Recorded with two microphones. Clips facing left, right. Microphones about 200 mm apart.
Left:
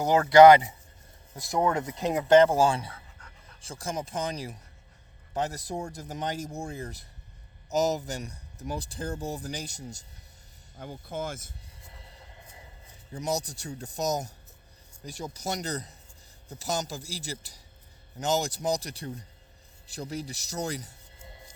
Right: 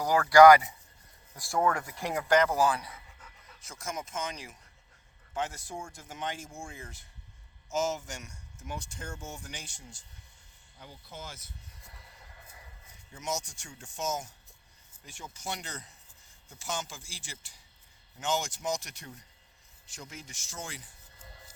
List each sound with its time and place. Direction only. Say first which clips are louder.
0.0 s speech: left 3 dB; 25° left (ahead or behind)
2.9 s pant: left 2 dB; 5° right (ahead or behind)
3.6 s speech: left 5 dB; 30° left (ahead or behind)
10.8 s speech: left 11 dB; 50° left (ahead or behind)
11.9 s vehicle: left 6 dB; 25° left (ahead or behind)
13.1 s speech: left 6 dB; 35° left (ahead or behind)
21.2 s music: left 3 dB; 25° left (ahead or behind)